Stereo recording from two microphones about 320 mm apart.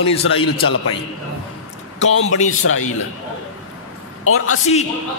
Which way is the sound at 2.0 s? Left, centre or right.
Left.